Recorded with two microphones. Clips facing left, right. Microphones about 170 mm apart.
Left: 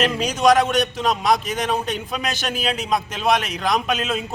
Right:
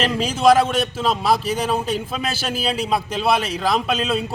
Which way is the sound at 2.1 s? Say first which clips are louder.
Right 1 dB; 5° right (ahead or behind).